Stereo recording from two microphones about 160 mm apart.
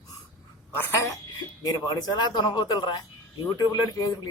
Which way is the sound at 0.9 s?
15° left (ahead or behind).